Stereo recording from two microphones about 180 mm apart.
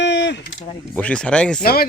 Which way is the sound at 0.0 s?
80° left.